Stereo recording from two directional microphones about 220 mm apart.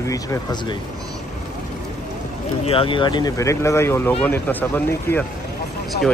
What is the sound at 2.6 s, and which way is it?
Speech, 25° left (ahead or behind).